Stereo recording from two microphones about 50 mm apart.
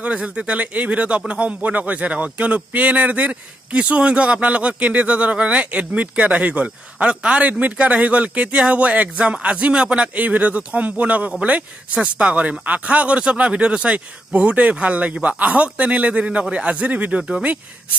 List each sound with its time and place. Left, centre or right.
0.0 s speech: right